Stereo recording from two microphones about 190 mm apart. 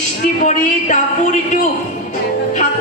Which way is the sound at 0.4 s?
40° left (ahead or behind).